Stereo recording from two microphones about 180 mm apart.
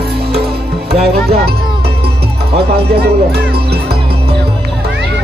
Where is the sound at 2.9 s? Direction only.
60° right (ahead or behind).